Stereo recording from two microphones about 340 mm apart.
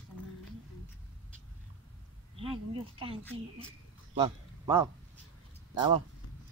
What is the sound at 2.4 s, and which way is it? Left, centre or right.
Speech, centre.